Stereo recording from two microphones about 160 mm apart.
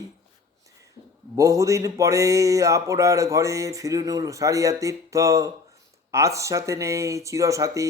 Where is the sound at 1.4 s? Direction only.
20° right (ahead or behind).